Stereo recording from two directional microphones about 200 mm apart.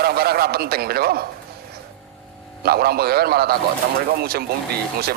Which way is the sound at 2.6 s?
50° right (ahead or behind).